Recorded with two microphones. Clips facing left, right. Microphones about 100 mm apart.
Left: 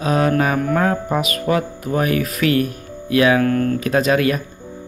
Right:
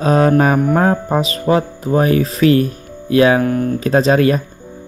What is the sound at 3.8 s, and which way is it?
Speech, 35° right (ahead or behind).